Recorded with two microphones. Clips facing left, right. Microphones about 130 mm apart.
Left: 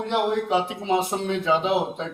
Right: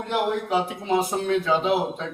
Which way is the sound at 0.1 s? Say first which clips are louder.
Left 1 dB; 25° left (ahead or behind).